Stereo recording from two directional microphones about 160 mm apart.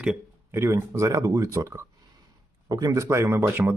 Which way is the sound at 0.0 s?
5° right (ahead or behind).